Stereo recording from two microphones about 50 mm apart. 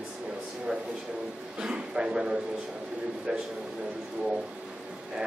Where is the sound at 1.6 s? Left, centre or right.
Centre.